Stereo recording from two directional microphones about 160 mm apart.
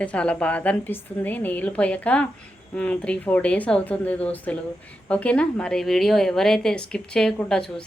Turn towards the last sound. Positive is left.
turn(degrees=5)  # may be behind; listen again after turning